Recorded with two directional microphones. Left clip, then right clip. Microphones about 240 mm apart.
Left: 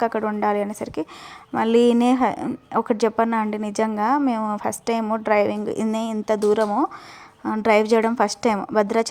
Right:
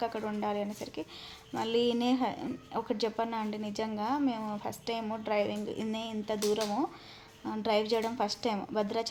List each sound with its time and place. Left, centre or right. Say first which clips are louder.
0.0 s speech: left 12 dB; left